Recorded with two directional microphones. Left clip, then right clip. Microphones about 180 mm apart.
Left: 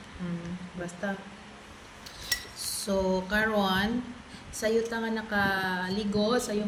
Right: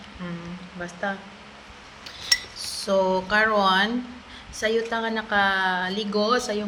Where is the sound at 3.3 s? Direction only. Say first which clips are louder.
Right 8 dB; 15° left (ahead or behind).